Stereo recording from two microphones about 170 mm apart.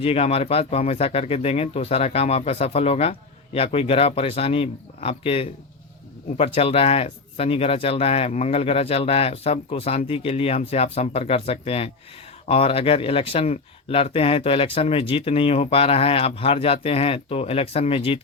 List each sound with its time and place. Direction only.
0.0 s speech: 35° left (ahead or behind)